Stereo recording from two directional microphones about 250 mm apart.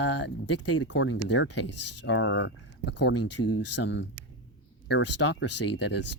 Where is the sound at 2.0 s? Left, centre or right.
Left.